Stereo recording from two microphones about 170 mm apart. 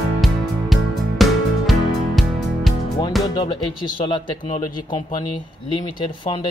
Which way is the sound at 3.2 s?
25° left (ahead or behind).